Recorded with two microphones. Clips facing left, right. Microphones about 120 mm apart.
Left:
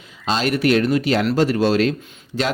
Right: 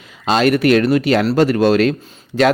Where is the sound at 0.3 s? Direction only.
60° right (ahead or behind).